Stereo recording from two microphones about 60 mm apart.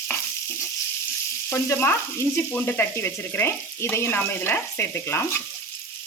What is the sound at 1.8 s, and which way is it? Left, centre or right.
Sizzle, left.